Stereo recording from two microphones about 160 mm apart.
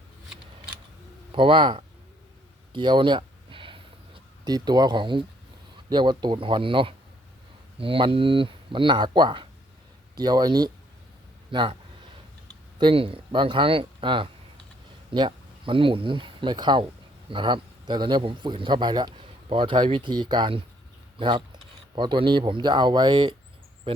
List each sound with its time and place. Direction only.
1.3 s speech: 30° right (ahead or behind)
2.7 s a sound: 30° right (ahead or behind)
5.9 s a man's voice: 30° right (ahead or behind)
12.8 s a man's voice: 35° right (ahead or behind)